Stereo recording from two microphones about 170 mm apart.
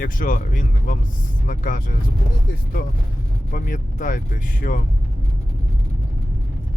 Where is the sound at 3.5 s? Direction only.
50° left (ahead or behind).